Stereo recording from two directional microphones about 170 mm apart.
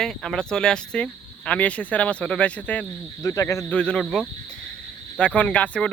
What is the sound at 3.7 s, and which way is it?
Speech, 5° left (ahead or behind).